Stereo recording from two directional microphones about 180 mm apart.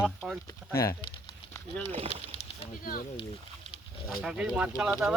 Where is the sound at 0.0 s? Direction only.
5° right (ahead or behind).